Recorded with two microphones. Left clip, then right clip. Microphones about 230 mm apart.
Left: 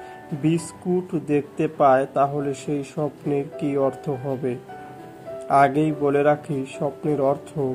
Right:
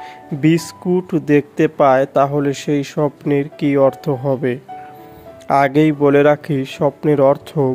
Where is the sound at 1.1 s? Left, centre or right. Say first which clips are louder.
Right 8 dB; right.